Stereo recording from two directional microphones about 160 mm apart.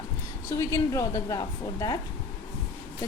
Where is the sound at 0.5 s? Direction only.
20° left (ahead or behind).